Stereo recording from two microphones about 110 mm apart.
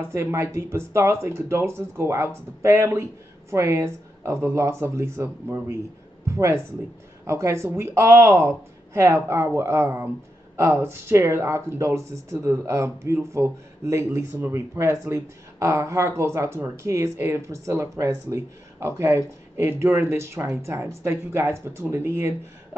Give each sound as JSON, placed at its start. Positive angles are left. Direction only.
{"t": 0.0, "sound": "speech", "side_deg": -25}